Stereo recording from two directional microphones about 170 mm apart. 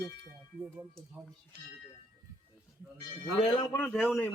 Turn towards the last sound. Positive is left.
turn(degrees=5)  # may be behind; listen again after turning